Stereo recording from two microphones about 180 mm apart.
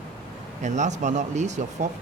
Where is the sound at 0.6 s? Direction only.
40° right (ahead or behind).